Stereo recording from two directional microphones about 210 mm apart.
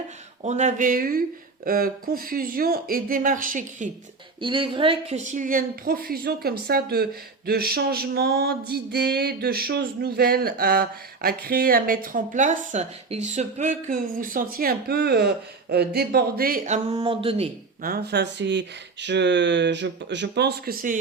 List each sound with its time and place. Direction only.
0.4 s a woman's voice: 35° right (ahead or behind)
4.4 s a woman's voice: 25° right (ahead or behind)
16.9 s a sound: 25° right (ahead or behind)
17.8 s speech: 50° right (ahead or behind)